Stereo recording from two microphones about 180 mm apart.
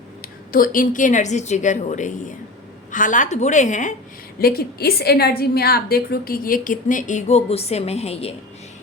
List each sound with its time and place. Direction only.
0.5 s a woman's voice: 50° left (ahead or behind)
4.4 s a woman's voice: 60° left (ahead or behind); by 8.4 s 35° left (ahead or behind)